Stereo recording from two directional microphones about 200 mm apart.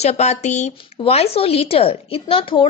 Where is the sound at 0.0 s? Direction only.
35° left (ahead or behind).